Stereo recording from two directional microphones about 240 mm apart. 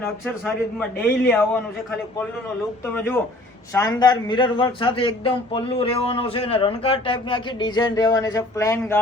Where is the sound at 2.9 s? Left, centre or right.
Centre.